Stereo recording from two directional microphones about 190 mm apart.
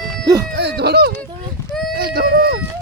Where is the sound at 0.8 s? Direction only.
60° right (ahead or behind).